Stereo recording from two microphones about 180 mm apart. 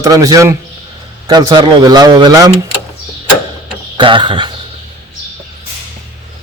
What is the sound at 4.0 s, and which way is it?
Speech, 25° right (ahead or behind).